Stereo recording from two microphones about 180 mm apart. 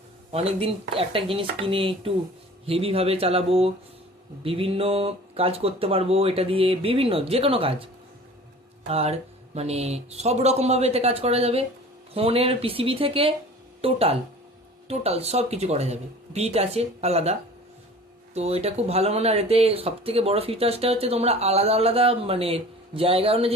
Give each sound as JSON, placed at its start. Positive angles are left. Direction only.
{"t": 0.3, "sound": "speech", "side_deg": -35}
{"t": 8.9, "sound": "speech", "side_deg": -35}
{"t": 18.3, "sound": "speech", "side_deg": -35}